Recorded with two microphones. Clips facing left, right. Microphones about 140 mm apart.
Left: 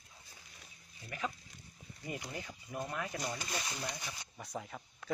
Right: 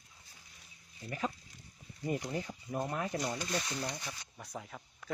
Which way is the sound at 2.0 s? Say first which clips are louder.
Right 7 dB; 40° right (ahead or behind).